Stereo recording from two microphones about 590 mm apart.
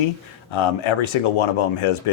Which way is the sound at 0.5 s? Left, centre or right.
Left.